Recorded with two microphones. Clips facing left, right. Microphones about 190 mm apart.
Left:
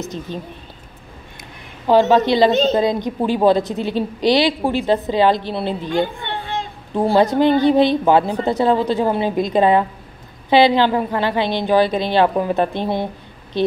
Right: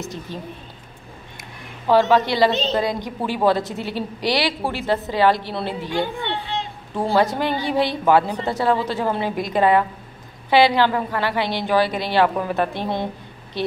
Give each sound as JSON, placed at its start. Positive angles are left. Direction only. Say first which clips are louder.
{"t": 0.3, "sound": "a woman's voice", "louder": "left 4 dB", "side_deg": 20}
{"t": 1.9, "sound": "a woman's voice", "louder": "left 3 dB", "side_deg": 20}
{"t": 5.9, "sound": "a sound", "louder": "left 2 dB", "side_deg": 50}
{"t": 7.0, "sound": "a woman's voice", "louder": "left 5 dB", "side_deg": 15}